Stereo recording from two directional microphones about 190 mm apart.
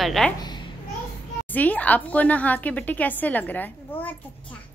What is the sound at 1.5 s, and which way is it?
A woman's voice, 10° left (ahead or behind).